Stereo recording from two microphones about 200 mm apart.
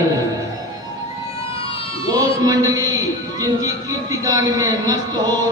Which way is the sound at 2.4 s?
20° right (ahead or behind).